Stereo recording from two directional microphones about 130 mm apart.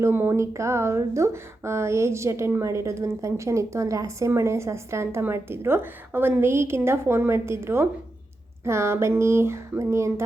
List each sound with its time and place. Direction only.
0.0 s speech: 15° right (ahead or behind)